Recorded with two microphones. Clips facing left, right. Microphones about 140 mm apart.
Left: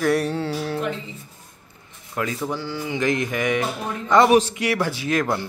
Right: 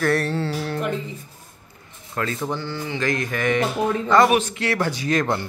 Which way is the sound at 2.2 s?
10° left (ahead or behind).